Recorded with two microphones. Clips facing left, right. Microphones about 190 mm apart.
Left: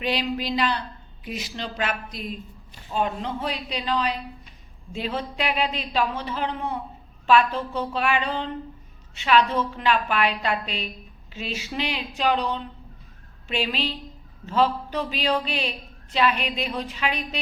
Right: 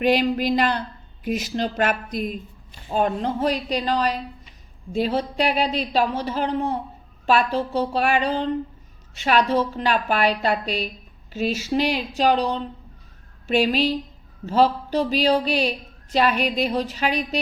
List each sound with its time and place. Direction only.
0.0 s speech: 50° right (ahead or behind)